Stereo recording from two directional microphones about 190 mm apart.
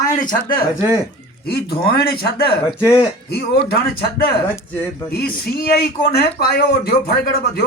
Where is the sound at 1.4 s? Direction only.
55° left (ahead or behind).